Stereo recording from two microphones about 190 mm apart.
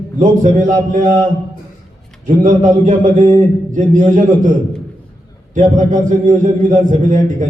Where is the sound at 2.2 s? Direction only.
40° right (ahead or behind).